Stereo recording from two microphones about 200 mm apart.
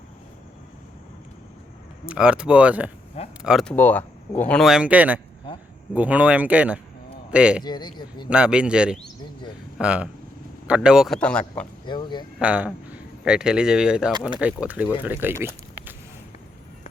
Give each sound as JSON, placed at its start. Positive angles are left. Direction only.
{"t": 2.0, "sound": "a man's voice", "side_deg": -5}
{"t": 7.6, "sound": "speech", "side_deg": 20}
{"t": 8.3, "sound": "speech", "side_deg": -5}
{"t": 11.9, "sound": "speech", "side_deg": 20}
{"t": 12.4, "sound": "a man's voice", "side_deg": -5}